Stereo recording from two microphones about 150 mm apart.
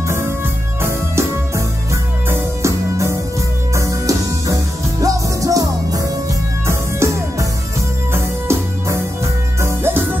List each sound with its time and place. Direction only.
0.8 s music: 20° right (ahead or behind)